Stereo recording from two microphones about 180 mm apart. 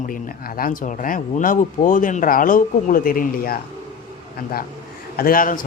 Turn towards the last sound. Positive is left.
turn(degrees=50)  # may be behind; listen again after turning